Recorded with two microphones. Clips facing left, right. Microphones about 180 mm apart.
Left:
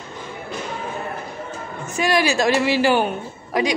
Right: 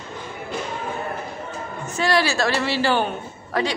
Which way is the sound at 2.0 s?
15° left (ahead or behind).